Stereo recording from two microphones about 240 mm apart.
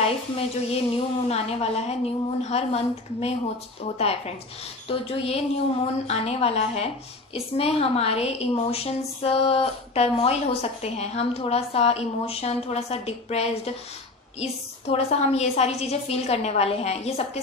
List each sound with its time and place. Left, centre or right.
0.7 s a woman's voice: left